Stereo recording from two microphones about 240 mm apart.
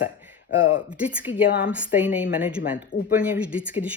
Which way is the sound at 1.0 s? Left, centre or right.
Centre.